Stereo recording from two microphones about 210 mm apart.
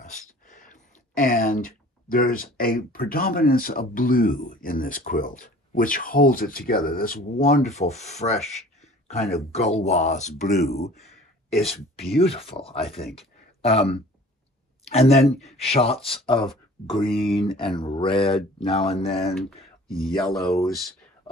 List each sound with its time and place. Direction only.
0.1 s speech: 40° left (ahead or behind)
9.0 s a sound: 30° left (ahead or behind)
9.5 s speech: 30° left (ahead or behind)
12.3 s speech: 25° left (ahead or behind)
19.9 s speech: centre (ahead or behind)